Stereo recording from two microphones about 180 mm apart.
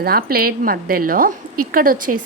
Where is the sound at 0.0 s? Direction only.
55° right (ahead or behind).